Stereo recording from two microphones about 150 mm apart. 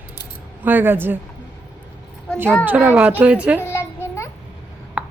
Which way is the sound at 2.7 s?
10° right (ahead or behind).